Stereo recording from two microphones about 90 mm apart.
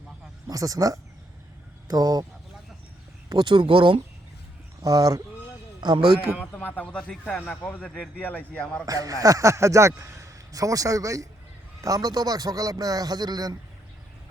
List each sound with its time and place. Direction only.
0.4 s a man's voice: 40° right (ahead or behind)
3.2 s speech: 55° right (ahead or behind); by 4.0 s 80° right
4.8 s a man's voice: 40° right (ahead or behind)
5.8 s a man's voice: 55° right (ahead or behind)
6.6 s a man's voice: 20° left (ahead or behind)
8.9 s a man's voice: 40° right (ahead or behind)